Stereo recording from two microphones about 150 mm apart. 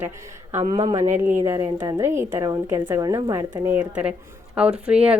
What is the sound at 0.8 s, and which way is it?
Speech, 45° right (ahead or behind).